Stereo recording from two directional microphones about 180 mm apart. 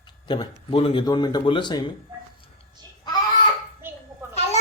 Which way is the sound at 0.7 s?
30° left (ahead or behind).